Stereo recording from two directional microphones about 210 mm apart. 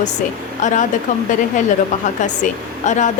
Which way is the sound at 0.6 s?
35° left (ahead or behind).